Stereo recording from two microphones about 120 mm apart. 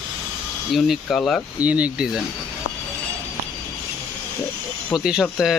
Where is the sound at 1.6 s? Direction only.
10° right (ahead or behind).